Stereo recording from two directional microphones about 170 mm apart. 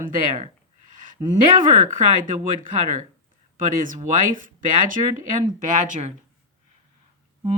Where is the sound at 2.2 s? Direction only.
50° right (ahead or behind).